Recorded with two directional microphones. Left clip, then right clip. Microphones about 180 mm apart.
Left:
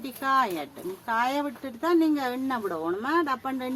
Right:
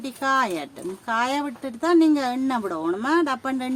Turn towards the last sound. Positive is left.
turn(degrees=-80)